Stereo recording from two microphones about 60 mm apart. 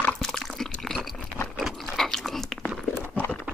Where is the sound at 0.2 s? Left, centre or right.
Centre.